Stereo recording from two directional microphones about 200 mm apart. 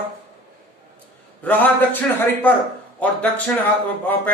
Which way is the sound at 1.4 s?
10° left (ahead or behind).